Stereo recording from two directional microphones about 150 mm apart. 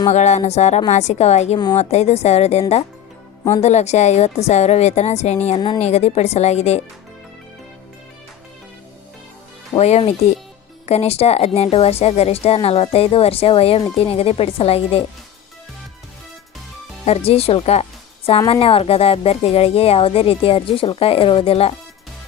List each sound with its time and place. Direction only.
0.1 s a woman's voice: 50° left (ahead or behind)
5.5 s speech: 25° left (ahead or behind)
5.8 s a woman's voice: 45° left (ahead or behind)
9.7 s a woman's voice: 45° left (ahead or behind)
17.1 s speech: 40° left (ahead or behind)